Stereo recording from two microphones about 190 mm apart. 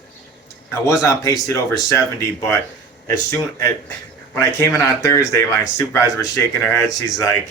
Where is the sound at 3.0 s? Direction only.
15° left (ahead or behind).